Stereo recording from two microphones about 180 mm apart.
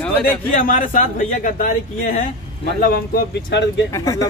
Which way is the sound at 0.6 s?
45° left (ahead or behind).